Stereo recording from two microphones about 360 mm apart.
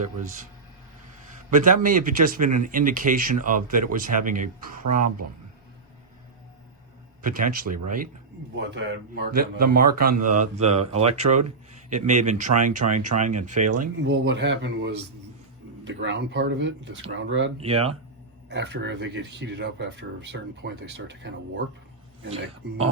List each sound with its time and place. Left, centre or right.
1.5 s a man's voice: right
7.2 s a man's voice: right
17.6 s speech: centre
18.4 s a man's voice: right